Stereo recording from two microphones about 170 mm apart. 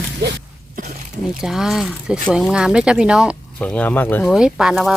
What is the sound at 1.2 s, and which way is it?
Speech, centre (ahead or behind).